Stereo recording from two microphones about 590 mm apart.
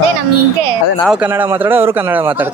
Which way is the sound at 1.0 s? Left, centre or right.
Centre.